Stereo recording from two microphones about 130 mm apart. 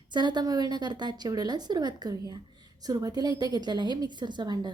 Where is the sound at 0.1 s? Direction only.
35° right (ahead or behind).